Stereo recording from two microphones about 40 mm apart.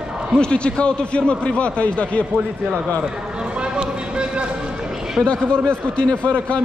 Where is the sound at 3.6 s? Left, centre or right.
Right.